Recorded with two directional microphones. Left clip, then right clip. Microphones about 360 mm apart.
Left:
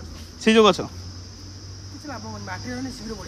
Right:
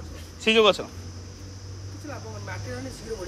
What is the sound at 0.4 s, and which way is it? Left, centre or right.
Speech, centre.